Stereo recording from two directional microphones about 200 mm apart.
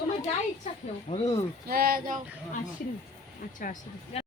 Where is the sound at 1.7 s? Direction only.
50° right (ahead or behind).